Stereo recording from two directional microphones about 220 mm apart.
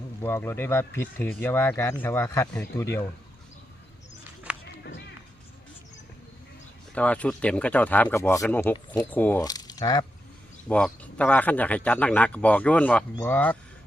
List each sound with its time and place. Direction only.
0.2 s speech: 10° left (ahead or behind)
4.5 s run: 5° right (ahead or behind)
6.9 s speech: 5° left (ahead or behind)
10.7 s speech: 5° left (ahead or behind)